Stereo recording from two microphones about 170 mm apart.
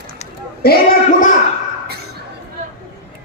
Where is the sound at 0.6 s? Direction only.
65° left (ahead or behind).